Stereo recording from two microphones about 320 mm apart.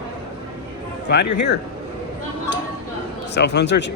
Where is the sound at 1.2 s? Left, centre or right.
Left.